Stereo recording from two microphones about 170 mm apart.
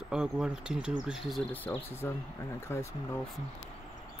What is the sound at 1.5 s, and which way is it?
Speech, 10° left (ahead or behind).